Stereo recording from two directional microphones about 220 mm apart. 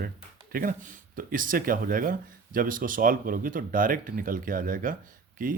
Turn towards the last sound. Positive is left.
turn(degrees=-40)  # may be behind; listen again after turning